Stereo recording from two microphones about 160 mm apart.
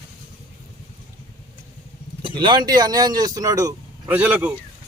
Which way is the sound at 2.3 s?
25° right (ahead or behind).